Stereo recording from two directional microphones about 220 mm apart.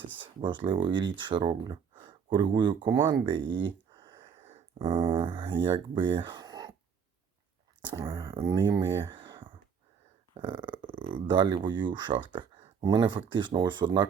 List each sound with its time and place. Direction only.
0.2 s speech: 20° right (ahead or behind)
1.6 s a sound: 20° right (ahead or behind)
2.6 s speech: 20° right (ahead or behind)
3.5 s a sound: 20° right (ahead or behind)
5.6 s speech: 20° right (ahead or behind)
7.9 s speech: 20° right (ahead or behind)